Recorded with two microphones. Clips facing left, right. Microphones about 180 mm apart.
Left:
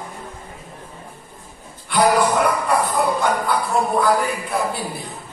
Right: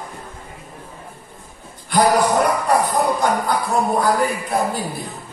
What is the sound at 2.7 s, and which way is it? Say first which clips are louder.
Speech: right 2 dB; 40° right (ahead or behind).